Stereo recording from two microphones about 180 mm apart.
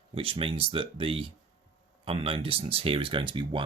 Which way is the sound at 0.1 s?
30° right (ahead or behind).